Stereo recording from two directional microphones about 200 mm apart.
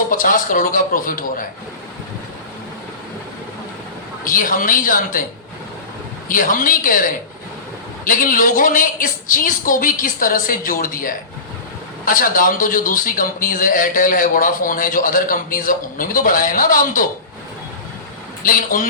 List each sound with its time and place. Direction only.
0.1 s a man's voice: 45° left (ahead or behind)
4.3 s a man's voice: 45° left (ahead or behind)
6.2 s a man's voice: 45° left (ahead or behind)
18.4 s a man's voice: 45° left (ahead or behind)